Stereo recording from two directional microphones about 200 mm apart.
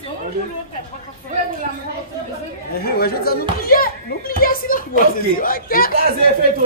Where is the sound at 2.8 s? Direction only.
50° left (ahead or behind).